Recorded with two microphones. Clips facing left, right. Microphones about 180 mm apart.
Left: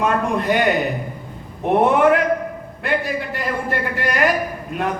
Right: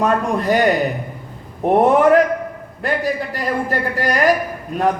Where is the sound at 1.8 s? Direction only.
40° right (ahead or behind).